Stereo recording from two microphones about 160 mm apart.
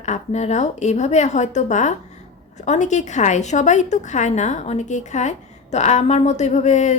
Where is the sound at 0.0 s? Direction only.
45° left (ahead or behind).